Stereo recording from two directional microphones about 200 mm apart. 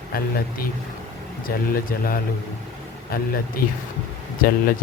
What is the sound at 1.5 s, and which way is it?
Speech, 45° left (ahead or behind).